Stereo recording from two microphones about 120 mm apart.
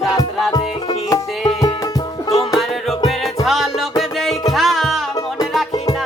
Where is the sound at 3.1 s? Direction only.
Centre (ahead or behind).